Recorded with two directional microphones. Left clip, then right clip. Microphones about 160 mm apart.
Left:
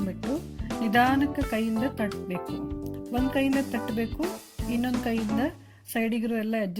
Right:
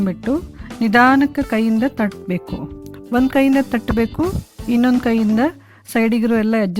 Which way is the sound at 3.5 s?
40° right (ahead or behind).